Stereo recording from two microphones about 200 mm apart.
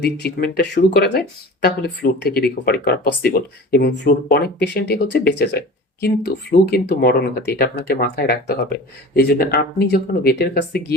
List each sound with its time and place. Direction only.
0.0 s speech: 55° left (ahead or behind)